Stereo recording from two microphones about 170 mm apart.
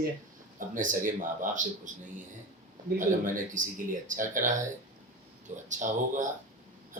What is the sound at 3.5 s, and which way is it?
Speech, 50° right (ahead or behind).